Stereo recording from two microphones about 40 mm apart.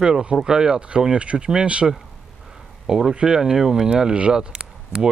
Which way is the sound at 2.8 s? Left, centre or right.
Centre.